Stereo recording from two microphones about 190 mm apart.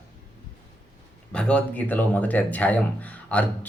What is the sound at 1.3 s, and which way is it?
Speech, 5° left (ahead or behind).